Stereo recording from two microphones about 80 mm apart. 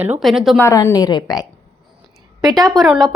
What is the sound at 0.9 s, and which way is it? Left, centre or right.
Speech, left.